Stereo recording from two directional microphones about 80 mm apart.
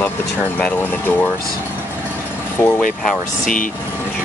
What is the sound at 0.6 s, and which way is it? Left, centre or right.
Speech, left.